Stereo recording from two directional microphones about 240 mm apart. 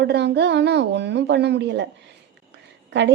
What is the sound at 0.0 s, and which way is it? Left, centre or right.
A woman's voice, right.